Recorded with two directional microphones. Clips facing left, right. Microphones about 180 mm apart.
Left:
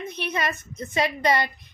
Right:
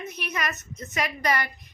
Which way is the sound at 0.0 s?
30° left (ahead or behind).